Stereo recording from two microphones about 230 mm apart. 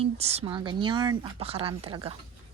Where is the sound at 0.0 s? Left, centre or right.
Right.